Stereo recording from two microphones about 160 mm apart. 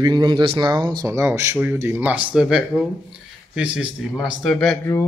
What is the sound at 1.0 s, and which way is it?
Speech, 20° right (ahead or behind).